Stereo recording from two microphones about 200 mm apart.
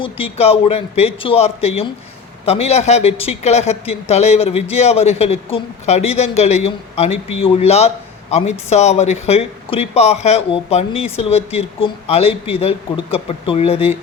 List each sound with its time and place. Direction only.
0.0 s a man's voice: 30° left (ahead or behind)